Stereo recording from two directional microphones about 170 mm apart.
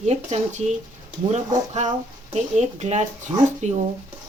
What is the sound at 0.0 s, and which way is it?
Speech, 40° right (ahead or behind).